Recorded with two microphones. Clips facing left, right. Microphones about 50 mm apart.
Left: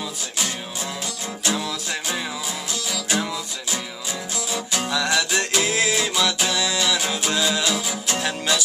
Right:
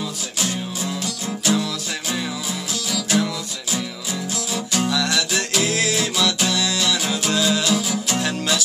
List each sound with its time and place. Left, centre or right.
1.4 s music: centre
4.5 s music: centre